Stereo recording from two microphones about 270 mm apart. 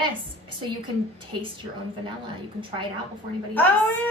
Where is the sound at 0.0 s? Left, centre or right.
Centre.